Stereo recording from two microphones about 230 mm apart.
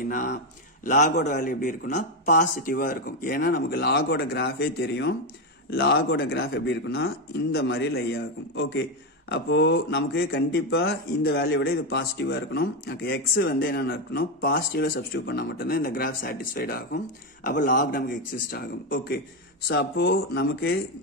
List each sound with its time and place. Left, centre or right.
0.0 s speech: left